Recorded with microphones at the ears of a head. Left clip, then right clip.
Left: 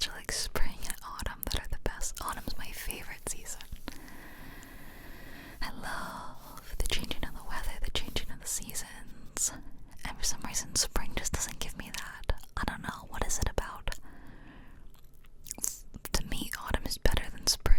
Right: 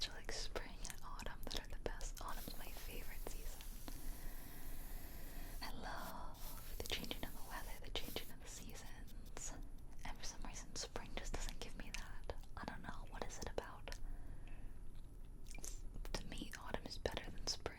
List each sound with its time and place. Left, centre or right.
0.0 s whispering: left
5.3 s whispering: left
15.4 s whispering: left